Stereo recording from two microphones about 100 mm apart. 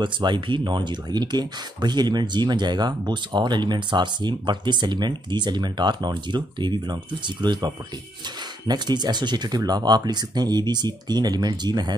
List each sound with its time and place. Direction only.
0.0 s speech: 50° right (ahead or behind)